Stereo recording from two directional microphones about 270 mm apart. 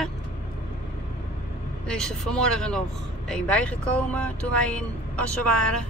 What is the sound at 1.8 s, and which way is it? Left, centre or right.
Speech, centre.